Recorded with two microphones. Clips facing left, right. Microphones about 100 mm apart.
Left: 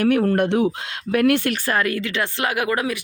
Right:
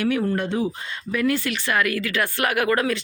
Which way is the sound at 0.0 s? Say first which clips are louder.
Left 5 dB; 55° left (ahead or behind).